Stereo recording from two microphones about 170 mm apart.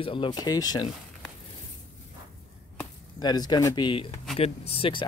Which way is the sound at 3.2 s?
25° left (ahead or behind).